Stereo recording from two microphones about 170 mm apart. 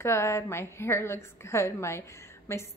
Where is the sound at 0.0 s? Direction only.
15° left (ahead or behind).